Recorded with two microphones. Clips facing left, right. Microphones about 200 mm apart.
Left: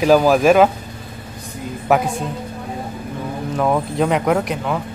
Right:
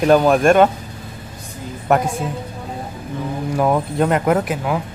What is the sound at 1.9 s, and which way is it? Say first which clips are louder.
Speech: even; centre (ahead or behind).